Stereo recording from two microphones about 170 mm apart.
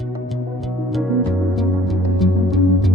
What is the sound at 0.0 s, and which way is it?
Music, centre (ahead or behind).